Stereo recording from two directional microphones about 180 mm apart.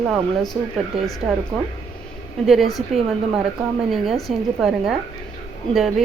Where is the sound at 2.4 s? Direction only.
Centre (ahead or behind).